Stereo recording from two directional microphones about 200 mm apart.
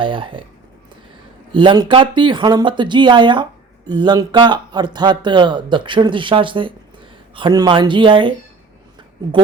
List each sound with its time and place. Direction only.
0.0 s speech: 25° right (ahead or behind)
1.5 s speech: 20° right (ahead or behind)